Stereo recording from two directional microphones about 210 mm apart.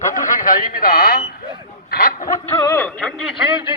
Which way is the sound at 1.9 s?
45° left (ahead or behind).